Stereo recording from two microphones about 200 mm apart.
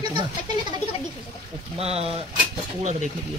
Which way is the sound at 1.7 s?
30° right (ahead or behind).